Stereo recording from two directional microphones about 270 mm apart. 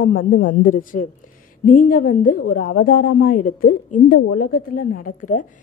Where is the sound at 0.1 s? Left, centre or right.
Left.